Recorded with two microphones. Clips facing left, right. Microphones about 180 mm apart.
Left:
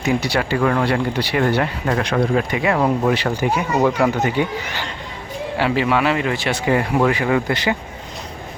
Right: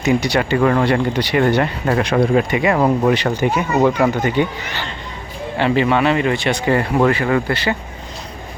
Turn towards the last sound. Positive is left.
turn(degrees=15)  # may be behind; listen again after turning